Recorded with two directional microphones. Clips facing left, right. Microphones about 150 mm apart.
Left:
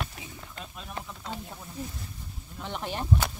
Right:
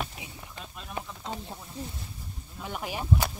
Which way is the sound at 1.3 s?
25° right (ahead or behind).